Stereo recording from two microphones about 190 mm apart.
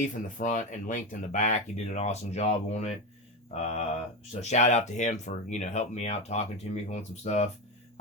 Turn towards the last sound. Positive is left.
turn(degrees=35)  # may be behind; listen again after turning